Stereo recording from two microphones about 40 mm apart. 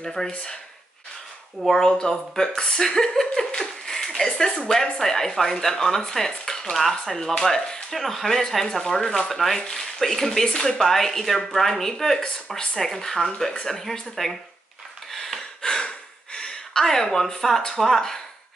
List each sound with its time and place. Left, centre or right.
0.0 s speech: centre
1.7 s speech: centre
7.9 s a man's voice: centre
15.0 s gasp: centre
15.6 s a sound: centre
16.8 s speech: centre